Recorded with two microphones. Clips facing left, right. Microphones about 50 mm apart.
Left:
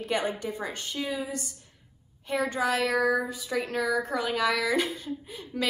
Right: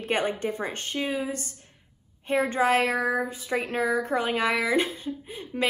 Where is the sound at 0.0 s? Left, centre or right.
Right.